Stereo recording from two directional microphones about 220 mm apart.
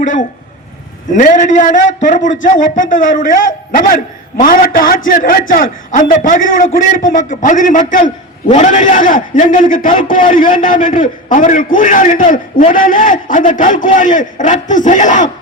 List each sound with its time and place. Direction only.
0.0 s a man's voice: 35° left (ahead or behind)